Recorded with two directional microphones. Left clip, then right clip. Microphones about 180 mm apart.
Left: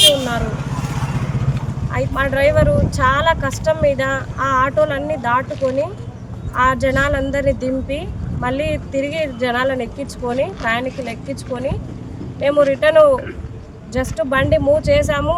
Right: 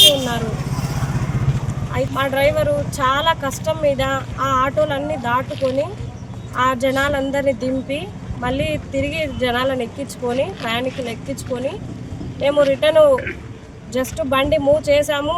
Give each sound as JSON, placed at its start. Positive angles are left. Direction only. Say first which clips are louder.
{"t": 0.1, "sound": "vehicle", "louder": "left 2 dB", "side_deg": -10}
{"t": 0.8, "sound": "vehicle", "louder": "left 1 dB", "side_deg": -60}
{"t": 1.9, "sound": "speech", "louder": "left 1 dB", "side_deg": -10}
{"t": 5.5, "sound": "speech", "louder": "left 1 dB", "side_deg": 15}
{"t": 6.6, "sound": "speech", "louder": "left 2 dB", "side_deg": -10}